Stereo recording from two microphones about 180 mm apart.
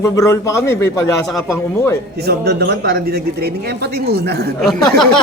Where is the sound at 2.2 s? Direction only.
60° right (ahead or behind).